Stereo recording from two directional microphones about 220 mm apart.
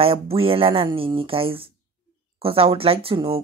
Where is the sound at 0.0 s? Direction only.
25° right (ahead or behind).